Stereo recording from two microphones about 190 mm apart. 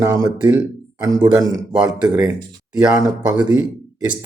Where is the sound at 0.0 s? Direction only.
15° right (ahead or behind).